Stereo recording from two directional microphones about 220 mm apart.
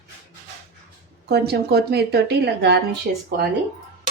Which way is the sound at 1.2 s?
50° right (ahead or behind).